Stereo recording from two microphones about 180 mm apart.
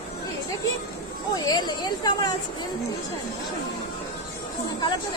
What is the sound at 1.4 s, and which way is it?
Speech, 20° left (ahead or behind).